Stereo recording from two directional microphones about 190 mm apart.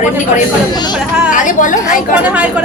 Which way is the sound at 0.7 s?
20° left (ahead or behind).